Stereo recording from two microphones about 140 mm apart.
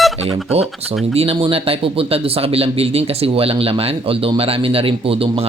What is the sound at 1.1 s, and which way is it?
Speech, 45° right (ahead or behind).